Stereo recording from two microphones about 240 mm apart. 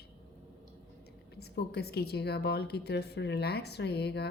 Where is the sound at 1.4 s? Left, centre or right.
Left.